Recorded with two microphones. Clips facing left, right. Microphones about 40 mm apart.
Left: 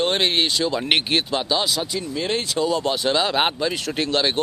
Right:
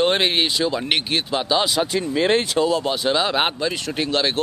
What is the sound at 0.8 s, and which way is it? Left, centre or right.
Speech, centre.